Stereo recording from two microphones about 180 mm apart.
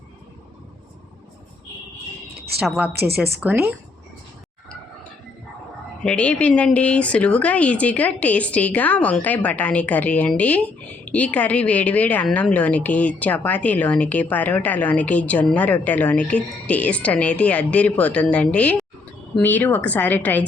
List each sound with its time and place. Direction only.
2.6 s a woman's voice: 5° right (ahead or behind)
2.9 s a woman's voice: 65° right (ahead or behind)
3.4 s speech: 10° right (ahead or behind)
6.0 s speech: 5° left (ahead or behind)